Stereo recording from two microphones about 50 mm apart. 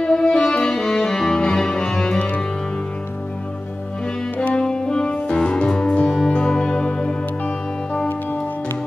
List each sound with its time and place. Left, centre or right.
0.0 s music: centre
2.1 s music: left
4.4 s music: centre